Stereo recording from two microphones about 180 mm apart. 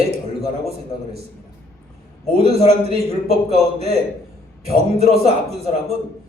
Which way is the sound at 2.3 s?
35° right (ahead or behind).